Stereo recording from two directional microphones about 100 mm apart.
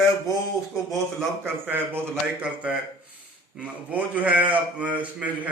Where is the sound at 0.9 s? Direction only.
5° left (ahead or behind).